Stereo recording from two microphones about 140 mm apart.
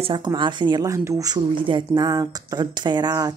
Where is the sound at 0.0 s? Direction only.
35° right (ahead or behind).